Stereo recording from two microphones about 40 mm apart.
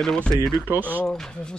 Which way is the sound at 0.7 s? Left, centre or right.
Right.